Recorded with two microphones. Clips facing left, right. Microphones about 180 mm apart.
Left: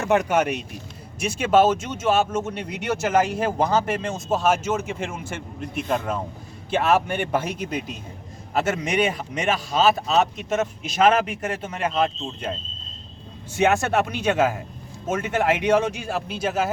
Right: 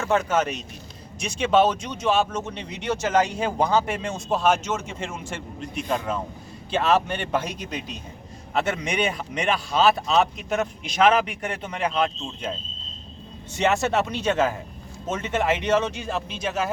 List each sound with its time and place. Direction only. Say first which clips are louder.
0.0 s speech: left 2 dB; 15° left (ahead or behind)